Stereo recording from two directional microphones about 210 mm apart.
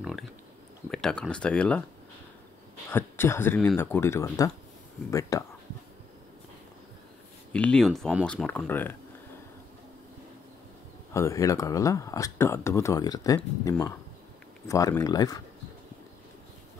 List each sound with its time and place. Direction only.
0.0 s a sound: centre (ahead or behind)
0.8 s speech: 5° left (ahead or behind)
2.9 s speech: 10° left (ahead or behind)
7.5 s speech: 5° left (ahead or behind)
11.1 s speech: 15° left (ahead or behind)